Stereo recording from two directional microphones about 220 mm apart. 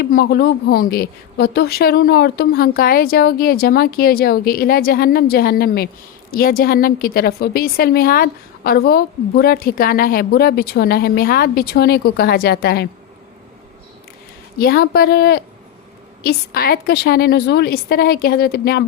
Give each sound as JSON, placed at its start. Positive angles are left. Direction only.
{"t": 0.0, "sound": "a woman's voice", "side_deg": 45}
{"t": 14.6, "sound": "a woman's voice", "side_deg": 45}